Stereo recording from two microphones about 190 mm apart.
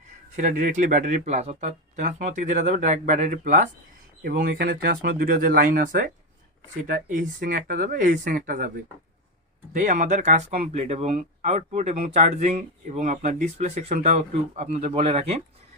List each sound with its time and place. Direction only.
0.3 s speech: 45° right (ahead or behind)
9.7 s speech: 40° right (ahead or behind)